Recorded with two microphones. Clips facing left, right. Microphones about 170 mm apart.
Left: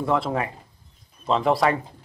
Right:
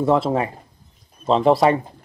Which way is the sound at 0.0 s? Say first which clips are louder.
Right 5 dB; 25° right (ahead or behind).